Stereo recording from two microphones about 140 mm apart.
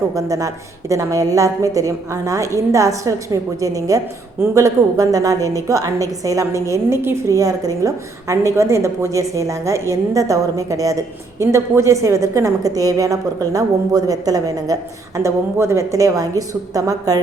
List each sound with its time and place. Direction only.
0.1 s a woman's voice: 25° right (ahead or behind)